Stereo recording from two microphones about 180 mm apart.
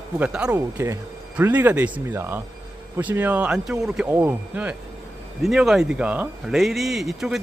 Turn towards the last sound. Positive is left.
turn(degrees=0)  # may be behind; listen again after turning